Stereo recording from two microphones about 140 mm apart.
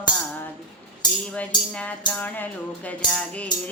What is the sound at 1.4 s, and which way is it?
Music, 10° left (ahead or behind).